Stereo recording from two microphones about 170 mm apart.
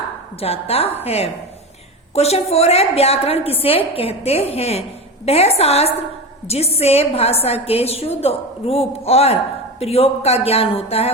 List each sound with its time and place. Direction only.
0.3 s a woman's voice: 35° left (ahead or behind)